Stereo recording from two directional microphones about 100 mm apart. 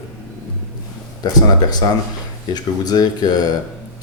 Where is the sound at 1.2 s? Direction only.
40° left (ahead or behind).